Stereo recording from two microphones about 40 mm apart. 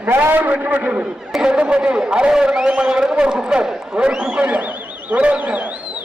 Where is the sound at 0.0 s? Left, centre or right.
Right.